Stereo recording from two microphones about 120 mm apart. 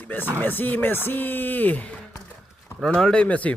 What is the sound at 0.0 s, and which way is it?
Speech, 15° left (ahead or behind).